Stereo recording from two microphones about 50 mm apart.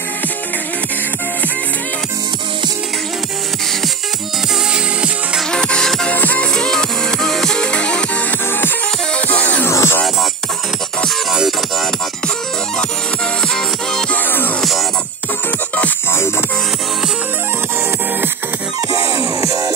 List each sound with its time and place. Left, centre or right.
4.7 s music: centre
5.5 s music: centre
6.1 s music: left
6.5 s music: centre
9.1 s music: left
9.7 s music: left
14.1 s music: left
16.1 s music: left
18.9 s music: right